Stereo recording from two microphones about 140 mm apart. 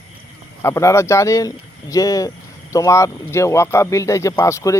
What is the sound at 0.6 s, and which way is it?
Speech, 20° left (ahead or behind).